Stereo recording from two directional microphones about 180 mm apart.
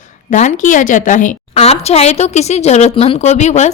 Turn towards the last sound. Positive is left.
turn(degrees=40)  # may be behind; listen again after turning